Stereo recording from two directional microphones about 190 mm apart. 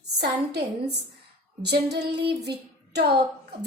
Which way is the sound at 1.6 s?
60° right (ahead or behind).